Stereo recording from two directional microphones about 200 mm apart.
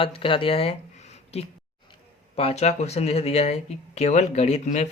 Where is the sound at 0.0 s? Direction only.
25° left (ahead or behind).